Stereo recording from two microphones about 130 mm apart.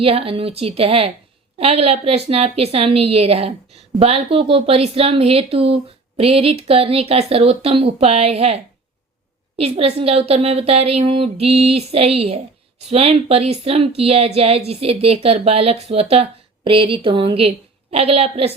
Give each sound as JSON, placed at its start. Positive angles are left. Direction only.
{"t": 0.0, "sound": "a woman's voice", "side_deg": -45}